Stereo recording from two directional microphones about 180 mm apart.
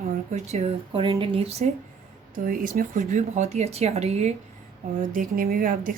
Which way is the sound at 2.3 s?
50° right (ahead or behind).